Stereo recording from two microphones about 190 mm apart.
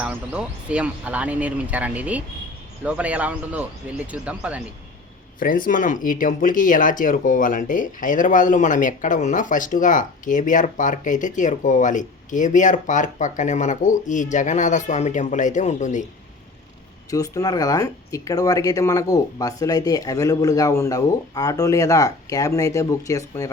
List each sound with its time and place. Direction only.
0.0 s speech: 5° right (ahead or behind)
5.4 s speech: 45° left (ahead or behind)
17.1 s speech: 20° left (ahead or behind)